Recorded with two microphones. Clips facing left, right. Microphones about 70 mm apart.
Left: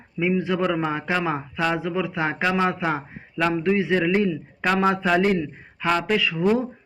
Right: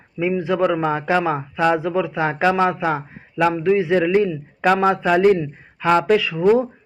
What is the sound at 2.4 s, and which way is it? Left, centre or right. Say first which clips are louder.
Speech: right 6 dB; centre.